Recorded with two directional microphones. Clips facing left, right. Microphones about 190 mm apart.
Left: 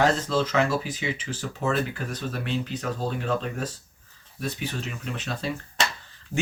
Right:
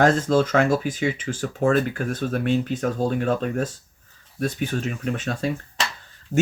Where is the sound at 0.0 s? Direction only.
50° right (ahead or behind).